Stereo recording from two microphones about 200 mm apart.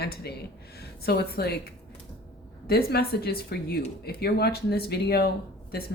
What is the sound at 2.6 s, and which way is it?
Speech, 50° left (ahead or behind).